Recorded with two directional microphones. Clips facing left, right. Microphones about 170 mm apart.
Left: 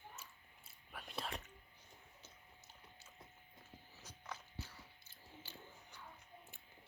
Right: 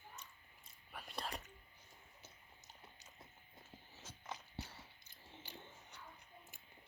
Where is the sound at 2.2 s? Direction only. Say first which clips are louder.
Even; 15° right (ahead or behind).